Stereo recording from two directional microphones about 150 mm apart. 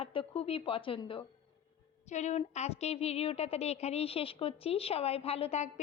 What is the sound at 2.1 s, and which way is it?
A woman's voice, 50° left (ahead or behind).